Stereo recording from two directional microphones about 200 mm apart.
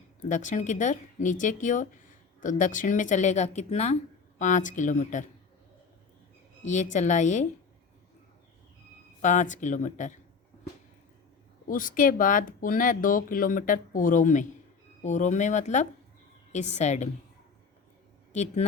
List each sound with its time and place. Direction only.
0.2 s speech: 40° left (ahead or behind)
6.7 s speech: 40° left (ahead or behind)
9.2 s speech: 40° left (ahead or behind)
11.7 s speech: 45° left (ahead or behind)